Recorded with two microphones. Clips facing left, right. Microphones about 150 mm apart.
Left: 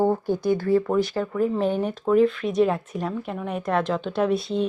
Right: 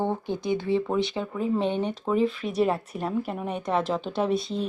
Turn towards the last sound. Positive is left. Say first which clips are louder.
# left 3 dB
turn(degrees=0)  # may be behind; listen again after turning